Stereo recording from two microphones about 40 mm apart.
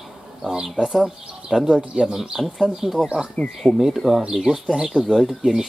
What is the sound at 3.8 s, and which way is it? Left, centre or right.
Speech, centre.